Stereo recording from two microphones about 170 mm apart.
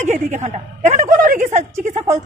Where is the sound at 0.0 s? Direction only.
45° right (ahead or behind).